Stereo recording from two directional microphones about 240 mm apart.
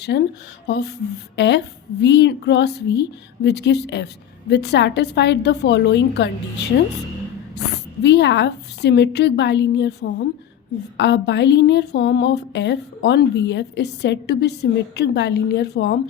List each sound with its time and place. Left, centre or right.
0.0 s a woman's voice: left
8.0 s a woman's voice: left